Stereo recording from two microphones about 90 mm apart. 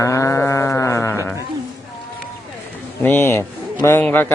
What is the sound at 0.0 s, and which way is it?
Livestock, 35° left (ahead or behind).